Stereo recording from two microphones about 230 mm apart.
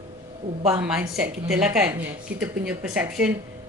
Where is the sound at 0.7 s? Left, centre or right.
Centre.